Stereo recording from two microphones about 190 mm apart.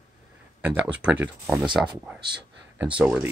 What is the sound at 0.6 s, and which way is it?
Speech, 5° right (ahead or behind).